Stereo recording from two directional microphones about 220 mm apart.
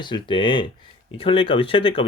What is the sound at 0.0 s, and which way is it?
Speech, 20° left (ahead or behind).